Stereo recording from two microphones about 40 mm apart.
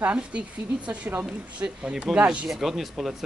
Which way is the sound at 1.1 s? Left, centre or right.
Right.